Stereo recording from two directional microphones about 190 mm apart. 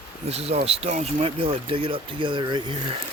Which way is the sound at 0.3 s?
35° right (ahead or behind).